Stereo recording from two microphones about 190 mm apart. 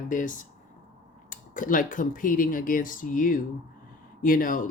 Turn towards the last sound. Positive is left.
turn(degrees=45)  # may be behind; listen again after turning